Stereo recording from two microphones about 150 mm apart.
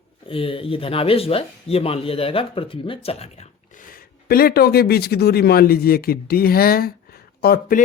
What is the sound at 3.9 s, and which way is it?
Speech, 85° left.